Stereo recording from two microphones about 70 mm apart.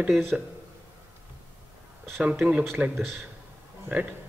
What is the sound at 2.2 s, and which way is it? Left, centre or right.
Speech, centre.